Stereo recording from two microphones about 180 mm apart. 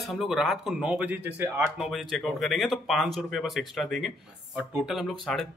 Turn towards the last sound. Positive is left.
turn(degrees=0)  # may be behind; listen again after turning